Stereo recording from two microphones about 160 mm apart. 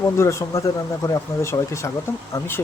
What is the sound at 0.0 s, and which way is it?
Speech, 20° left (ahead or behind).